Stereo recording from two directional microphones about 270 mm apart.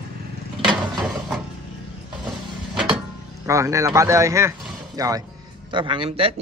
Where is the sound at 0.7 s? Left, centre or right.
Centre.